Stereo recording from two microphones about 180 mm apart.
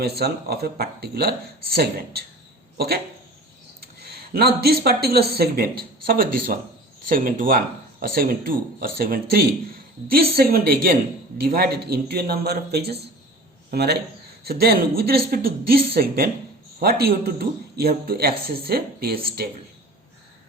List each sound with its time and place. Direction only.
0.2 s a man's voice: 60° right (ahead or behind)
4.0 s a man's voice: 60° right (ahead or behind)